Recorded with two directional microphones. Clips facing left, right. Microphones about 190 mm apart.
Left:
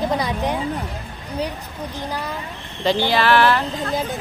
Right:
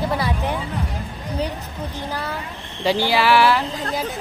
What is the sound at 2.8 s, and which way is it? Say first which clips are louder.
Speech: even; 10° right (ahead or behind).